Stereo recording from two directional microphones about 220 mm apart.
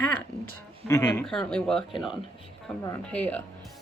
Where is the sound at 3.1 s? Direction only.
5° left (ahead or behind).